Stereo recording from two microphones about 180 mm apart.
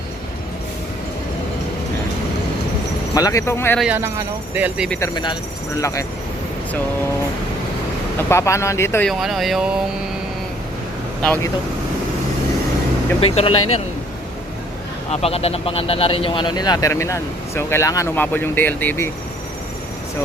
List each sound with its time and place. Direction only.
3.2 s speech: 20° left (ahead or behind)
3.8 s speech: 5° right (ahead or behind)
4.9 s speech: 20° left (ahead or behind)
8.3 s speech: 15° left (ahead or behind)
9.0 s speech: centre (ahead or behind)
13.1 s speech: 30° left (ahead or behind)
15.1 s speech: 35° left (ahead or behind); by 19.1 s 10° left (ahead or behind)